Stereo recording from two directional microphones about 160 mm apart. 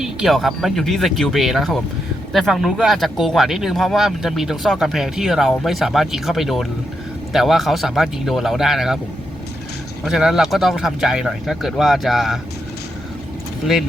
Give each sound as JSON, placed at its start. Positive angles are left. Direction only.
{"t": 0.0, "sound": "speech", "side_deg": 0}
{"t": 10.0, "sound": "speech", "side_deg": -5}